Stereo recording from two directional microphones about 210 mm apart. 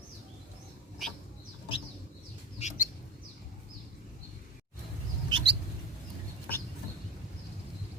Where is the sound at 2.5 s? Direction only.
35° left (ahead or behind).